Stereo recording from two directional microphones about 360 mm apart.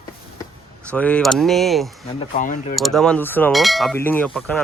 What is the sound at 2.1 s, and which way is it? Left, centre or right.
Speech, centre.